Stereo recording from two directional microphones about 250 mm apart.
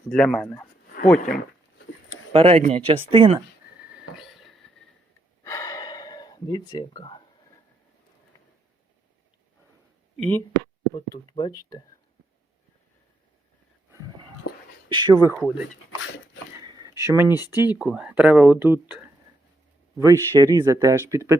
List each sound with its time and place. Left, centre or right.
0.1 s speech: centre
2.3 s speech: right
4.2 s a sound: centre
5.4 s gasp: centre
10.2 s speech: centre
10.9 s speech: centre
14.9 s speech: centre
15.4 s speech: centre
16.6 s a sound: centre
17.4 s speech: centre